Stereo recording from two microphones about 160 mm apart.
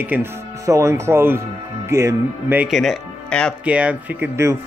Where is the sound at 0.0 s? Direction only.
15° right (ahead or behind).